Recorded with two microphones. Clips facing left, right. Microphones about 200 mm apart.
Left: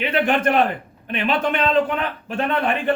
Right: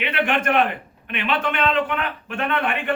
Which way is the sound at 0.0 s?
35° left (ahead or behind).